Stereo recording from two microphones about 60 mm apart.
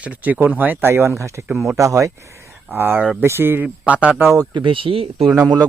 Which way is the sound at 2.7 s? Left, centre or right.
Right.